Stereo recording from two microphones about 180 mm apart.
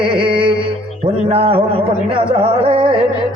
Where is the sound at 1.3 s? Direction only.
35° right (ahead or behind).